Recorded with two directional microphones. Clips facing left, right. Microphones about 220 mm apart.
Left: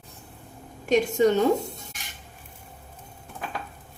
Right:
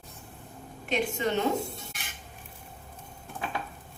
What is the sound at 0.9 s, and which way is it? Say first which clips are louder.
Speech: left 9 dB; 40° left (ahead or behind).